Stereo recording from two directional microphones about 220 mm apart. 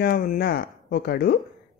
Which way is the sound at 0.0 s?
45° left (ahead or behind).